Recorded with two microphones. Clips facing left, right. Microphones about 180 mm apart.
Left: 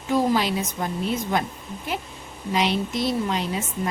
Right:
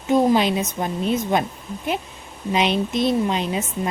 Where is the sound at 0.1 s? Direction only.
20° right (ahead or behind).